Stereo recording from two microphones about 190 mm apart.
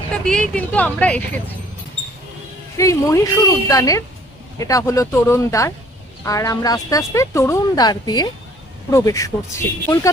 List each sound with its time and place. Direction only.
0.1 s speech: 5° left (ahead or behind)
2.7 s speech: 15° left (ahead or behind)